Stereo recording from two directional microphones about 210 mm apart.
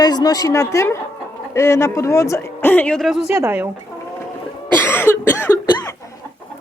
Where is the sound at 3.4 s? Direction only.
10° right (ahead or behind).